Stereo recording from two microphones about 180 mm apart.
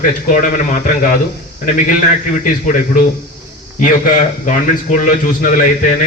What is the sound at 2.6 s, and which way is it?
Speech, 45° left (ahead or behind).